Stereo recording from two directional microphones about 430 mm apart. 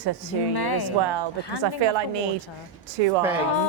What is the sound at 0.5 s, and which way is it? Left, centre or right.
Speech, left.